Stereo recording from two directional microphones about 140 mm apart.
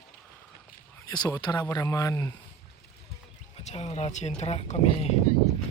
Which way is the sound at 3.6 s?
50° left (ahead or behind).